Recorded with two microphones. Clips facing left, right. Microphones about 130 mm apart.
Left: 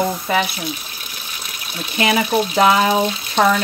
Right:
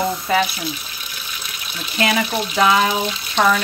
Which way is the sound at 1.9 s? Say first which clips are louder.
Left 2 dB; 20° left (ahead or behind).